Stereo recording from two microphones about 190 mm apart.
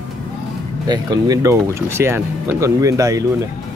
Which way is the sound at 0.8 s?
20° right (ahead or behind).